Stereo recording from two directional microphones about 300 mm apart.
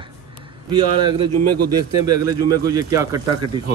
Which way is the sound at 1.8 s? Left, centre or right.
Centre.